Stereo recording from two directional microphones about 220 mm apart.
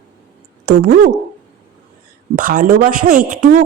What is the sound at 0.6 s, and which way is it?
Speech, 40° right (ahead or behind).